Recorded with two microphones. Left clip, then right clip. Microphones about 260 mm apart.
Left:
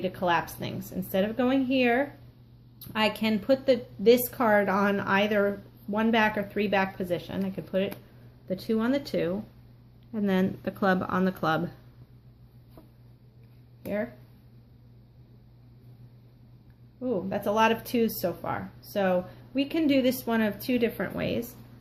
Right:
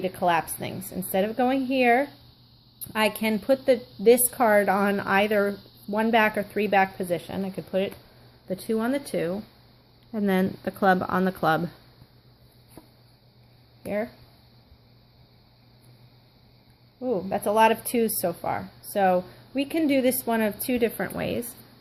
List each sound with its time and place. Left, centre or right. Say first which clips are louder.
0.0 s a woman's voice: right 3 dB; right
13.8 s a woman's voice: right 2 dB; right
17.0 s a woman's voice: right 3 dB; right